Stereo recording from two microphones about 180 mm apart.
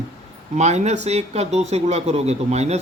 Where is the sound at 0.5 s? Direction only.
40° right (ahead or behind).